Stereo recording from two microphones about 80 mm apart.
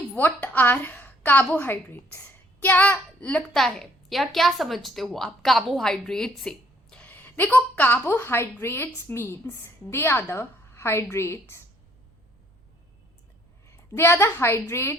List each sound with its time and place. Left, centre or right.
0.2 s a woman's voice: left
3.5 s a woman's voice: centre
7.0 s a woman's voice: left
13.7 s a woman's voice: left